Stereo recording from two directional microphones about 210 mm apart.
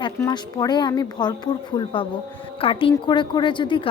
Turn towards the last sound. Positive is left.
turn(degrees=25)  # may be behind; listen again after turning